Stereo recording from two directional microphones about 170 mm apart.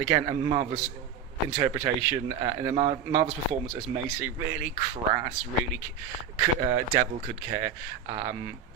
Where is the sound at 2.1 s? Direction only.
30° right (ahead or behind).